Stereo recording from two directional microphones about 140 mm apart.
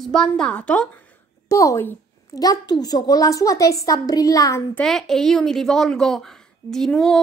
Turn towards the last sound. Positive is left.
turn(degrees=5)  # may be behind; listen again after turning